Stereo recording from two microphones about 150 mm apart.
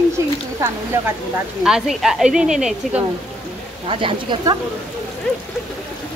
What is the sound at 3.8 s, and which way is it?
Speech, 35° right (ahead or behind).